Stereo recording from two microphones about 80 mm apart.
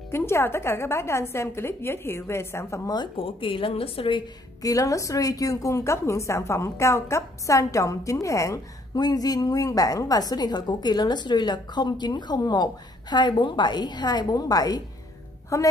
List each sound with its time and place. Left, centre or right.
0.1 s a woman's voice: left
2.9 s speech: left
4.6 s a woman's voice: left
8.9 s a woman's voice: left
13.1 s a woman's voice: left
15.5 s a woman's voice: left